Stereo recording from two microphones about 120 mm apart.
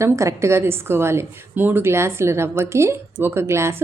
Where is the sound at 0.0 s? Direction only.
25° right (ahead or behind).